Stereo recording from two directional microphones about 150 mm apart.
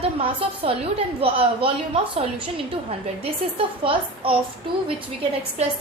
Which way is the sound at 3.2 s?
40° right (ahead or behind).